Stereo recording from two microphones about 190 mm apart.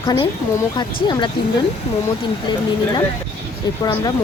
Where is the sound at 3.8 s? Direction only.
20° left (ahead or behind).